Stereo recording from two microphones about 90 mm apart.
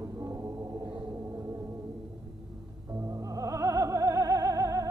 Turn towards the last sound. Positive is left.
turn(degrees=-40)  # may be behind; listen again after turning